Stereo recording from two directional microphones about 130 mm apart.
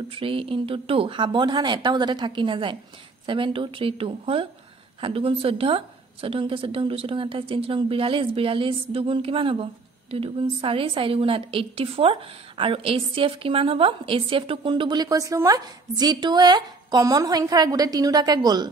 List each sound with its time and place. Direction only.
0.1 s a woman's voice: 45° right (ahead or behind)